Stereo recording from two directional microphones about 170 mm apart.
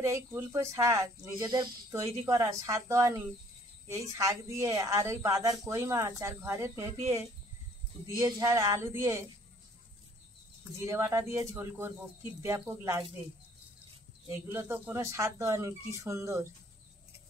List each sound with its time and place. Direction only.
0.0 s a woman's voice: 15° right (ahead or behind)
8.2 s speech: 20° right (ahead or behind)
10.6 s speech: 15° right (ahead or behind)
14.3 s speech: 15° right (ahead or behind)